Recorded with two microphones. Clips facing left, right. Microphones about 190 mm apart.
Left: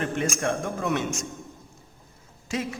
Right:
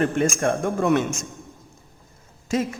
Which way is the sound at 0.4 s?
50° right (ahead or behind).